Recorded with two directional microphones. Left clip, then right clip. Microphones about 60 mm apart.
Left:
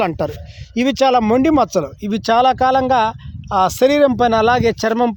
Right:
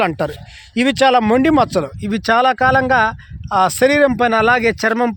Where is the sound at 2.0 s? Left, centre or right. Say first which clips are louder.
Even; left.